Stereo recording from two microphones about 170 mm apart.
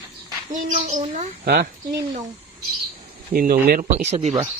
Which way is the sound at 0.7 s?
45° right (ahead or behind).